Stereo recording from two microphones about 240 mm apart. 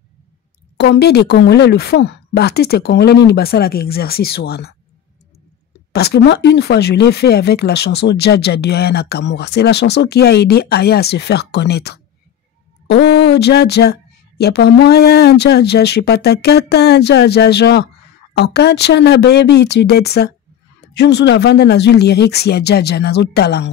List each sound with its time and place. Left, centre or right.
0.7 s speech: left
5.9 s speech: left